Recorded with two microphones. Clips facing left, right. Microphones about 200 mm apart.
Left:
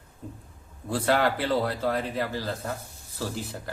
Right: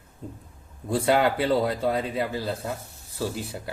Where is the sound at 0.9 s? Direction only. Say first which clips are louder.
Right 2 dB; 15° right (ahead or behind).